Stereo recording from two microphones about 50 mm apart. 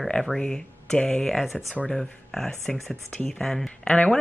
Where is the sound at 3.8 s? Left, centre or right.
Left.